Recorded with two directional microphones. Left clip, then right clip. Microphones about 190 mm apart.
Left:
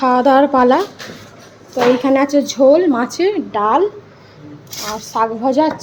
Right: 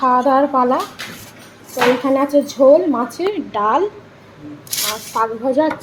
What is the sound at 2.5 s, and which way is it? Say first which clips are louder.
Speech: even; 30° left (ahead or behind).